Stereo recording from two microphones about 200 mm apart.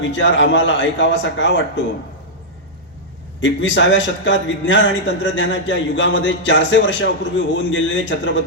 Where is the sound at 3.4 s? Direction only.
70° left (ahead or behind).